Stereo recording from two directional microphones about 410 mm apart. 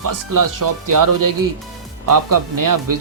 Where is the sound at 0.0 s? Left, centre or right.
Right.